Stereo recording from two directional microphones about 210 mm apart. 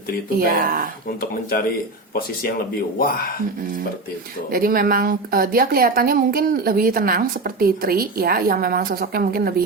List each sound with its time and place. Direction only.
0.3 s a woman's voice: 40° right (ahead or behind)
1.2 s speech: 45° left (ahead or behind)
4.5 s a woman's voice: 45° right (ahead or behind)